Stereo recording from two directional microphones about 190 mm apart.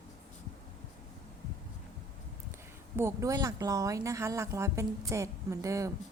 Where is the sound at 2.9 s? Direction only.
15° right (ahead or behind).